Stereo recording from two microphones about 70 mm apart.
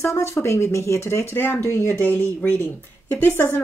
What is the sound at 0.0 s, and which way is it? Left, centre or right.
Speech, left.